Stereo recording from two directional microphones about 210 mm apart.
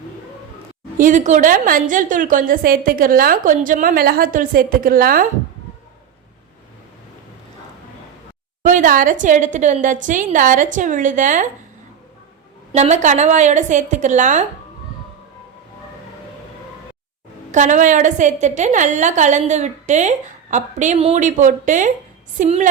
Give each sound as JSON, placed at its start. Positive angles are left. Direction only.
{"t": 0.9, "sound": "a woman's voice", "side_deg": -40}
{"t": 8.6, "sound": "a woman's voice", "side_deg": -40}
{"t": 12.7, "sound": "a woman's voice", "side_deg": -35}
{"t": 17.5, "sound": "a woman's voice", "side_deg": -35}